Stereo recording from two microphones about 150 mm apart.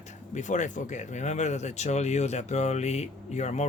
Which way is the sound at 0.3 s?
55° left (ahead or behind).